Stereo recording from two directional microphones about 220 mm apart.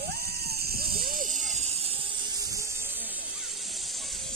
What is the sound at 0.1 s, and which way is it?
Music, 45° right (ahead or behind).